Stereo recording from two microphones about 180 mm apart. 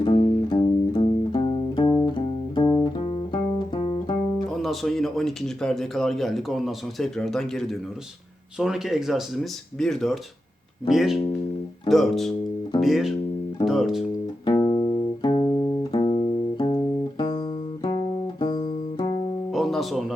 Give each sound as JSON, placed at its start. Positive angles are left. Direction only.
{"t": 0.5, "sound": "music", "side_deg": 25}
{"t": 4.6, "sound": "speech", "side_deg": 0}
{"t": 14.4, "sound": "music", "side_deg": 25}
{"t": 19.5, "sound": "music", "side_deg": 0}